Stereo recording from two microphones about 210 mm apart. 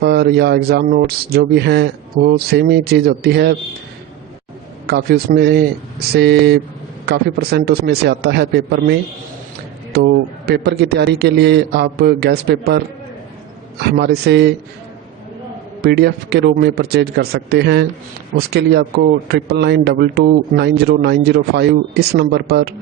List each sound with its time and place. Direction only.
0.0 s speech: 50° right (ahead or behind)
4.9 s speech: 50° right (ahead or behind)
15.8 s speech: 50° right (ahead or behind)